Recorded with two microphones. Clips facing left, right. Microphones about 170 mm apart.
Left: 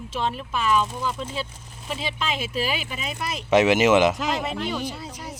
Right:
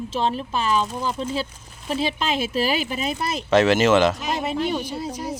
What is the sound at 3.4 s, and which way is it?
Speech, 15° left (ahead or behind).